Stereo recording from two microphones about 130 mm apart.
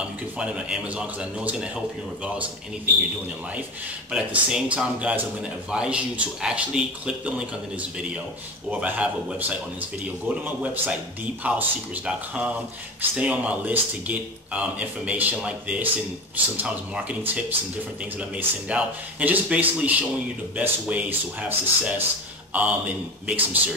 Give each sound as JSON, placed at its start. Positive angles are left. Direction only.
{"t": 0.4, "sound": "a man's voice", "side_deg": -5}
{"t": 4.1, "sound": "a man's voice", "side_deg": -5}
{"t": 8.6, "sound": "a man's voice", "side_deg": -10}